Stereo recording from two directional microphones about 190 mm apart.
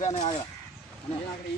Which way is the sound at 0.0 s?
35° left (ahead or behind).